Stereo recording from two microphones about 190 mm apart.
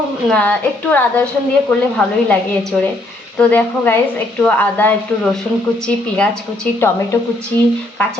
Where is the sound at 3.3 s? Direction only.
10° left (ahead or behind).